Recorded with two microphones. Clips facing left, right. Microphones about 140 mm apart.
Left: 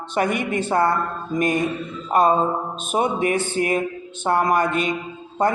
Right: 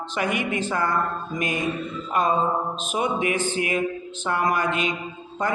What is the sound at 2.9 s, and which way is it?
Music, 40° left (ahead or behind).